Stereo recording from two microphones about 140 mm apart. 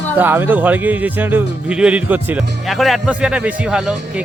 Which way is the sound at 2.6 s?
Centre (ahead or behind).